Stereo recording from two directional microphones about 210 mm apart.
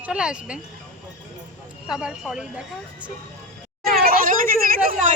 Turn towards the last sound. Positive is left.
turn(degrees=-40)  # may be behind; listen again after turning